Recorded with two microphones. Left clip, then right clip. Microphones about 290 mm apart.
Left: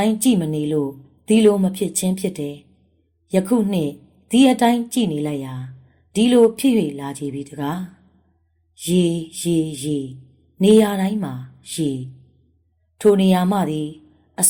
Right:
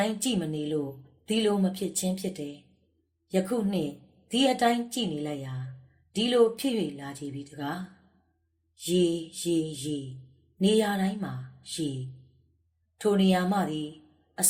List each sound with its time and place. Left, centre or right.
0.0 s speech: left
13.0 s speech: left